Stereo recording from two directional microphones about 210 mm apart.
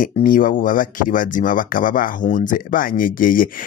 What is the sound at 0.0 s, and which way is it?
Speech, 40° left (ahead or behind).